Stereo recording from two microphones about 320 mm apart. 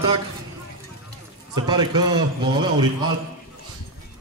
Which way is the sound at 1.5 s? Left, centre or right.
Centre.